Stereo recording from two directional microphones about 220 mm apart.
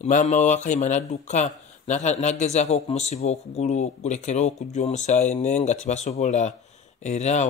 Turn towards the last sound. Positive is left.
turn(degrees=30)  # may be behind; listen again after turning